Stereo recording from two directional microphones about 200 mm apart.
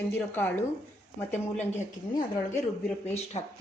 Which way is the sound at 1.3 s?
35° left (ahead or behind).